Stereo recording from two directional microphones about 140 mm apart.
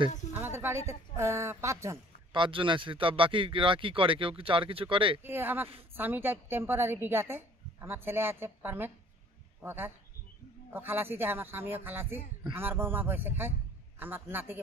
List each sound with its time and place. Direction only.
0.3 s a woman's voice: 15° right (ahead or behind)
2.3 s speech: 35° right (ahead or behind)
5.2 s a woman's voice: 15° right (ahead or behind)